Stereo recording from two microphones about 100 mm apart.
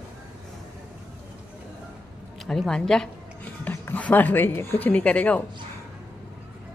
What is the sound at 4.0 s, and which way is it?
Speech, 15° left (ahead or behind).